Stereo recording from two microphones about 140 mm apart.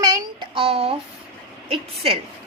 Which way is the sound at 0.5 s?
40° right (ahead or behind).